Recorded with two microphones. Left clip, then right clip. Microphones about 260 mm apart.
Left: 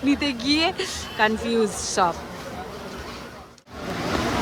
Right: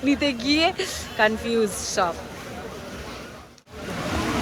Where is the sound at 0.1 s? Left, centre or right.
Centre.